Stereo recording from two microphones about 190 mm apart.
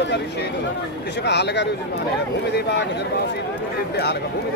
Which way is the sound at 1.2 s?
65° left (ahead or behind).